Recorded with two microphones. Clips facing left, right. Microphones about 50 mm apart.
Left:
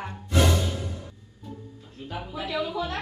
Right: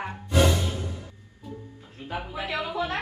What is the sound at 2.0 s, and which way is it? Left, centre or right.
Speech, right.